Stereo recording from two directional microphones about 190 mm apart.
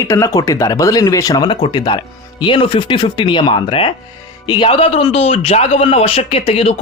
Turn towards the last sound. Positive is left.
turn(degrees=30)  # may be behind; listen again after turning